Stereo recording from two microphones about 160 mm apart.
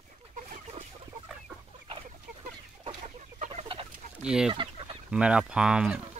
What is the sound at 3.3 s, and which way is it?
Chicken, 45° right (ahead or behind).